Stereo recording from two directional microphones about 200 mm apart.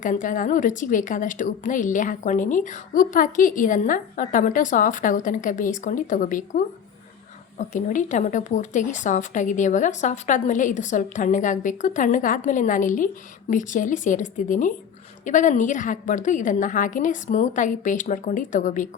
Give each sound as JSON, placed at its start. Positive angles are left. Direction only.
{"t": 0.0, "sound": "speech", "side_deg": 40}
{"t": 7.7, "sound": "speech", "side_deg": 40}